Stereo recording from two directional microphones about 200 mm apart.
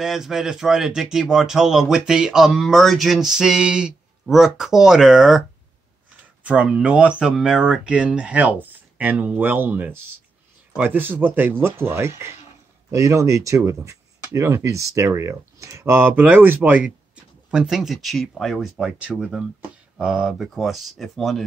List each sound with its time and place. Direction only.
0.0 s speech: centre (ahead or behind)
6.4 s speech: 5° right (ahead or behind)